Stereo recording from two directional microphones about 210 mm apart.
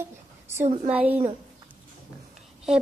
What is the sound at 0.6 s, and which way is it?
Speech, 30° right (ahead or behind).